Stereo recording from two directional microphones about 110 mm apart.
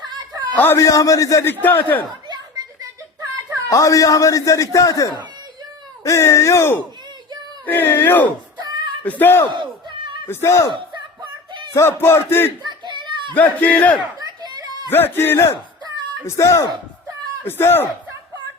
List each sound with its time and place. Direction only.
0.0 s a sound: 40° right (ahead or behind)
0.8 s a man's voice: 30° left (ahead or behind)
1.6 s a man's voice: 15° left (ahead or behind)
3.7 s a man's voice: 30° left (ahead or behind)
8.6 s a sound: 40° right (ahead or behind)
9.0 s a man's voice: 15° left (ahead or behind)
11.2 s a sound: 45° right (ahead or behind)
11.7 s speech: 25° left (ahead or behind)
12.6 s children playing: 45° right (ahead or behind)
13.3 s a man's voice: 15° left (ahead or behind)
14.2 s a sound: 40° right (ahead or behind)
14.8 s speech: 20° left (ahead or behind)